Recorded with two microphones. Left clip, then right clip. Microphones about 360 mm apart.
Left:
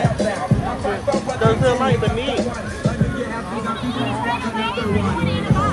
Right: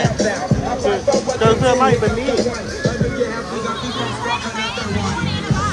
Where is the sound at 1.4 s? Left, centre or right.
Centre.